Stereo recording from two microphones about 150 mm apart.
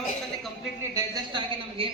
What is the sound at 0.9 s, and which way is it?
Speech, 30° right (ahead or behind).